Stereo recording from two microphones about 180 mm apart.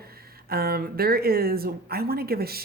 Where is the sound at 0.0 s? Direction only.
60° right (ahead or behind).